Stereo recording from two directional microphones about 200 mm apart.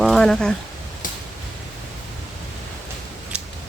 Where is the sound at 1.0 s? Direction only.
45° left (ahead or behind).